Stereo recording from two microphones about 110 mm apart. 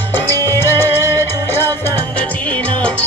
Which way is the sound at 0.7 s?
20° left (ahead or behind).